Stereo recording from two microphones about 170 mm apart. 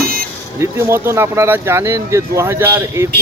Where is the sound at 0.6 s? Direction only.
15° right (ahead or behind).